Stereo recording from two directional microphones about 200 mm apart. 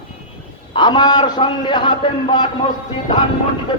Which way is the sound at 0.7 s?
25° left (ahead or behind).